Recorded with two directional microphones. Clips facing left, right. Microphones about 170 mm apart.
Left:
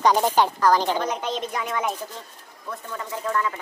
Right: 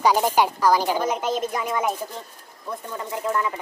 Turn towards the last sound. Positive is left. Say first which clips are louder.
# right 1 dB
turn(degrees=-15)  # may be behind; listen again after turning